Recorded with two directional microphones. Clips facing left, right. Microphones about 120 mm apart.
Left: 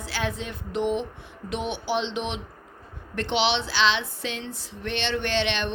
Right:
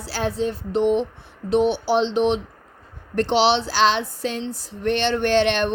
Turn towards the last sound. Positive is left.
turn(degrees=-45)  # may be behind; listen again after turning